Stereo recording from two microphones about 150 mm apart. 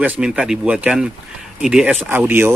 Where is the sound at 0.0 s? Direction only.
5° right (ahead or behind).